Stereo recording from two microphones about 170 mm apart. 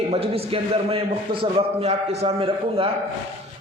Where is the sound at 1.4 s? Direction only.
35° right (ahead or behind).